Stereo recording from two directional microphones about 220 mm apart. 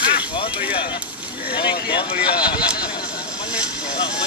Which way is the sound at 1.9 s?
45° left (ahead or behind).